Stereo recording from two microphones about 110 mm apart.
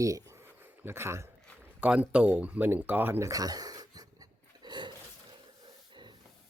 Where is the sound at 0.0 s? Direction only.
30° right (ahead or behind).